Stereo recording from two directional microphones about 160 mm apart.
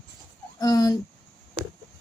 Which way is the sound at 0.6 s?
25° left (ahead or behind).